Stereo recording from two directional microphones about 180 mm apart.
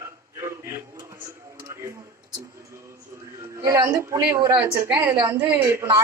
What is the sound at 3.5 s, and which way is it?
A woman's voice, 20° right (ahead or behind).